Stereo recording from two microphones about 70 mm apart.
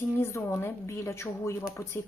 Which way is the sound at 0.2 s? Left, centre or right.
Left.